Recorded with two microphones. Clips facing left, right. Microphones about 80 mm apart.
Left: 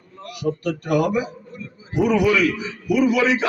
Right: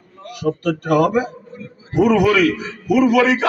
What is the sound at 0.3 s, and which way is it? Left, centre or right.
A man's voice, right.